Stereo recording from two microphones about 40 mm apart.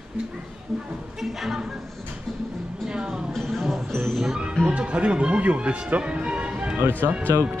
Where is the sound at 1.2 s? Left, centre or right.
Centre.